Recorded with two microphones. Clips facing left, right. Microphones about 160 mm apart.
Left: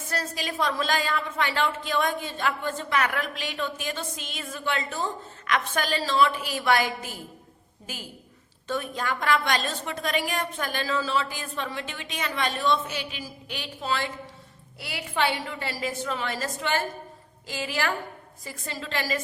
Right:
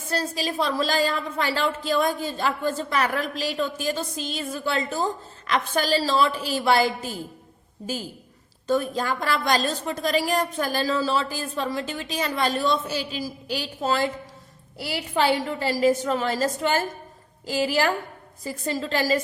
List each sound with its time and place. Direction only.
0.1 s a woman's voice: 30° right (ahead or behind)
8.6 s a woman's voice: 35° right (ahead or behind)